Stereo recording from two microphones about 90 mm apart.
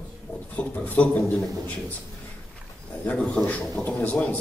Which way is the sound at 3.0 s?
15° left (ahead or behind).